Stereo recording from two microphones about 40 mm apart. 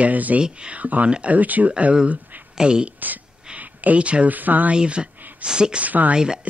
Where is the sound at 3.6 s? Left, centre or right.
Right.